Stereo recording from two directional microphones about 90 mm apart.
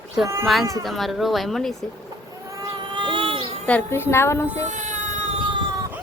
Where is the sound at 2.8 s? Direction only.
60° right (ahead or behind); by 3.5 s 90° right.